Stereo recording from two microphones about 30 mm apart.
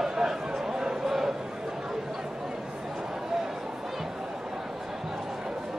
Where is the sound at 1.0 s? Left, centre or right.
Centre.